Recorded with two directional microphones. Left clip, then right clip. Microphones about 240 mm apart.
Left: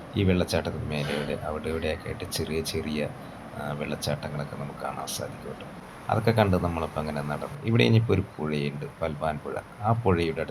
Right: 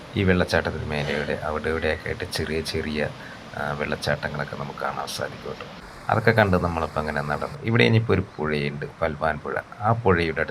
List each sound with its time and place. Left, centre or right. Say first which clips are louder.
0.1 s speech: right 5 dB; centre
6.1 s speech: right 5 dB; centre